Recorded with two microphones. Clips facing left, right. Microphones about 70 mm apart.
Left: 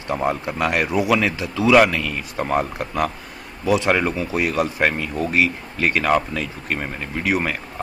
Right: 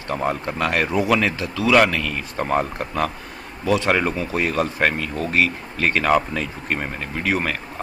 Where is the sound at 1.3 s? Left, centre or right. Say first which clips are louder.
Left 2 dB; centre.